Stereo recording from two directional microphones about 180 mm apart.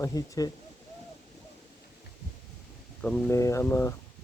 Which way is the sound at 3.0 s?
5° left (ahead or behind).